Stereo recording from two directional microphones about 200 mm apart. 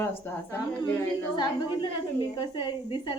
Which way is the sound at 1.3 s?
25° left (ahead or behind).